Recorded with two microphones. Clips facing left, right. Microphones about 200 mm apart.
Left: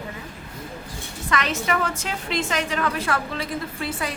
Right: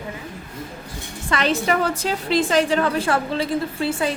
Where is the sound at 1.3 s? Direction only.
30° right (ahead or behind).